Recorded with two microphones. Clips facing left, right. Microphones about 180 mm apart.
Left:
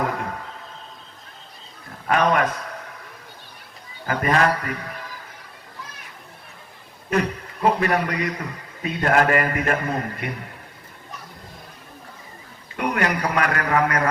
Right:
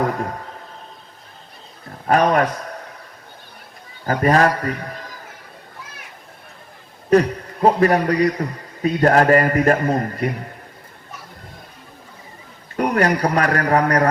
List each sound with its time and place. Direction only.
2.0 s a man's voice: 40° right (ahead or behind)
4.0 s a man's voice: 40° right (ahead or behind)
7.1 s a man's voice: 35° right (ahead or behind)
12.7 s a man's voice: 40° right (ahead or behind)